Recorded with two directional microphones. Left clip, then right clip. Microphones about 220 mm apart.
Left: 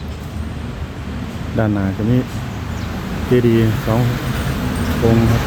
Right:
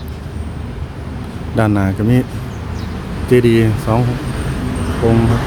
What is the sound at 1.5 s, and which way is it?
Speech, 25° right (ahead or behind).